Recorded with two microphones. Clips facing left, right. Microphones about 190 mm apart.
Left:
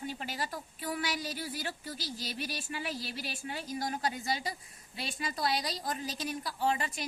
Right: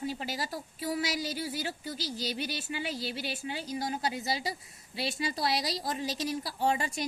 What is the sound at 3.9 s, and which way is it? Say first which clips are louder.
A woman's voice: right 1 dB; 30° right (ahead or behind).